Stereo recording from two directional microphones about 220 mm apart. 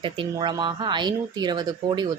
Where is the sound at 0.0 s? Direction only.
20° right (ahead or behind).